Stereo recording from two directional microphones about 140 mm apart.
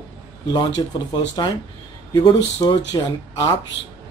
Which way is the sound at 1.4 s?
30° left (ahead or behind).